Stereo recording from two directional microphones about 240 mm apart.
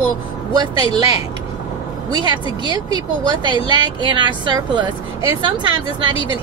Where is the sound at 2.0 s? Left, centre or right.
Centre.